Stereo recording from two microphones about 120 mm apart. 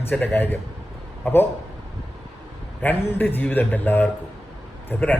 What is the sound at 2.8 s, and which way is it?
Speech, 15° left (ahead or behind).